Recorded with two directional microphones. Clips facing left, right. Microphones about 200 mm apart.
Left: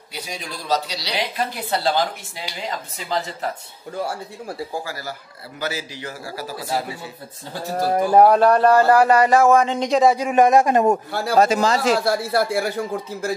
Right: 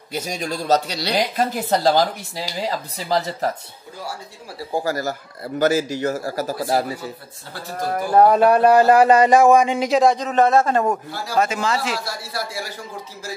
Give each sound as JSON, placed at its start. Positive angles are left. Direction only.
{"t": 0.1, "sound": "speech", "side_deg": -45}
{"t": 4.8, "sound": "speech", "side_deg": -45}
{"t": 8.3, "sound": "speech", "side_deg": -10}
{"t": 10.1, "sound": "a man's voice", "side_deg": 10}
{"t": 11.1, "sound": "speech", "side_deg": 55}
{"t": 11.3, "sound": "speech", "side_deg": 35}
{"t": 12.0, "sound": "speech", "side_deg": 55}